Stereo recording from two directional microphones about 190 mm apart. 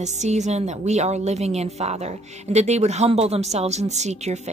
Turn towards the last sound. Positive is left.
turn(degrees=-35)  # may be behind; listen again after turning